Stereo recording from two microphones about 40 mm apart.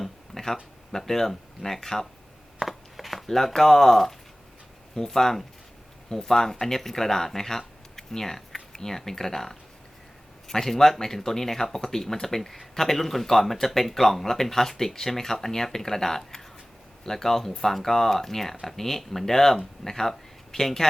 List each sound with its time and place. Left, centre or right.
0.0 s speech: centre
2.6 s a sound: centre
4.9 s speech: centre